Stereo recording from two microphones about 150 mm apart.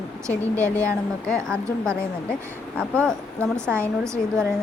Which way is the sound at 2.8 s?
5° left (ahead or behind).